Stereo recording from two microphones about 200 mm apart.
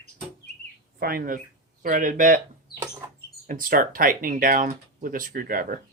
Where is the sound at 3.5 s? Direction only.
45° right (ahead or behind).